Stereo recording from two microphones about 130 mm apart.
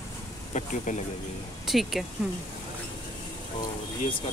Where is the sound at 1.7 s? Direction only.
Centre (ahead or behind).